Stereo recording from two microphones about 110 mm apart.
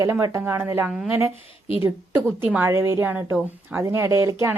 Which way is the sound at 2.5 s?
20° right (ahead or behind).